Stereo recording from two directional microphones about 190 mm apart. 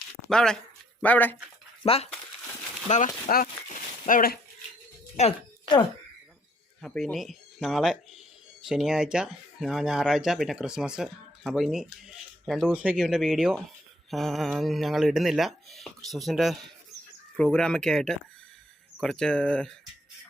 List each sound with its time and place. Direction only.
0.3 s speech: 5° left (ahead or behind)
1.8 s speech: 30° left (ahead or behind); by 4.4 s 50° left (ahead or behind)
5.1 s music: 35° left (ahead or behind)
6.8 s speech: centre (ahead or behind)